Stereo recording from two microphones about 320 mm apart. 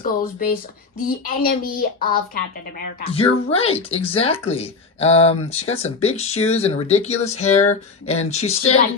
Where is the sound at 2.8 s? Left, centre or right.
Centre.